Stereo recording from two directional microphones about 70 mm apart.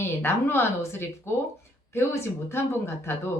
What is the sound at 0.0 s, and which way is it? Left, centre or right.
Speech, left.